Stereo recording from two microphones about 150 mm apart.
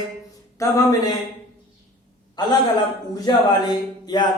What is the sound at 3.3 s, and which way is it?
Speech, 30° left (ahead or behind).